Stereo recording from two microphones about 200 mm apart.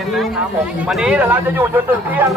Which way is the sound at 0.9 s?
5° right (ahead or behind).